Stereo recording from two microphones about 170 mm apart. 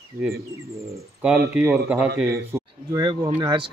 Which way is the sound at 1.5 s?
5° right (ahead or behind).